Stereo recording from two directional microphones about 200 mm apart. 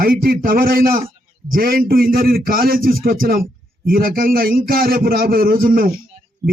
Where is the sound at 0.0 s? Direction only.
45° right (ahead or behind).